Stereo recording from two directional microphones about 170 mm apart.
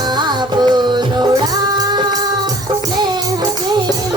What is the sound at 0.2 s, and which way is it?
Music, 25° right (ahead or behind).